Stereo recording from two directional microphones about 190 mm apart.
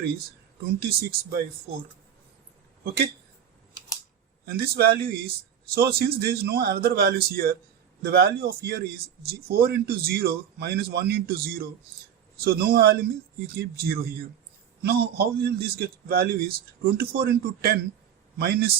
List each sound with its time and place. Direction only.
0.8 s a man's voice: 55° right (ahead or behind)
4.4 s a man's voice: 55° right (ahead or behind)